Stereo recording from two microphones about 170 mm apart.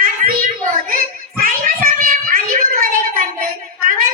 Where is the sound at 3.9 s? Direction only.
55° right (ahead or behind).